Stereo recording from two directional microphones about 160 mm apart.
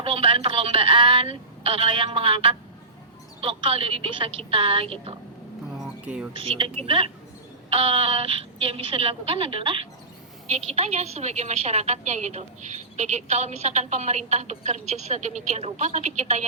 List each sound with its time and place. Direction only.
0.0 s a woman's voice: 35° right (ahead or behind)
5.8 s a sound: 5° right (ahead or behind)
6.3 s a woman's voice: 35° right (ahead or behind)